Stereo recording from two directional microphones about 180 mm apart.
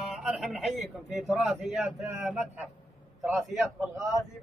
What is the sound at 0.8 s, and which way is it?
Speech, 40° right (ahead or behind).